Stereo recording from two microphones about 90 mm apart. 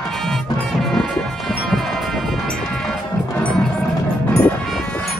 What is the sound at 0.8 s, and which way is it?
Music, centre (ahead or behind).